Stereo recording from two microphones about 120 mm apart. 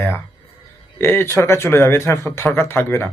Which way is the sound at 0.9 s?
20° left (ahead or behind).